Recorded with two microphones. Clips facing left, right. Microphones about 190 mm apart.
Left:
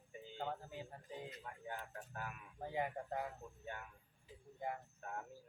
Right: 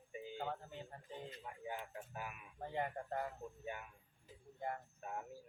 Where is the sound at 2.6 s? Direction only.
5° left (ahead or behind).